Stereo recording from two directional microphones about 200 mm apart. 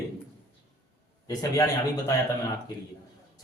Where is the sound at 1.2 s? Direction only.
15° left (ahead or behind).